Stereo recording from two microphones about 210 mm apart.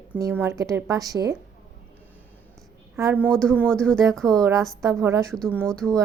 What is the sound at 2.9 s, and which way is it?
Speech, 15° right (ahead or behind).